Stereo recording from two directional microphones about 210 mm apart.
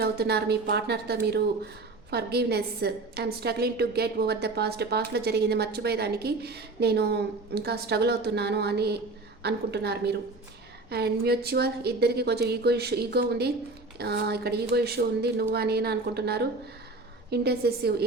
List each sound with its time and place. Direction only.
0.0 s speech: 50° right (ahead or behind)